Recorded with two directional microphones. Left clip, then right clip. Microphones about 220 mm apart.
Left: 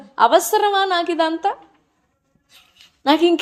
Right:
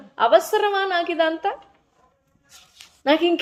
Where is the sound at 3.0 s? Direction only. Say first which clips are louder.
Left 3 dB; 35° left (ahead or behind).